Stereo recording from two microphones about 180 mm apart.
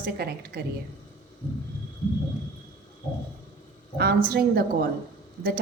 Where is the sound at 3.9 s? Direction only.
60° right (ahead or behind).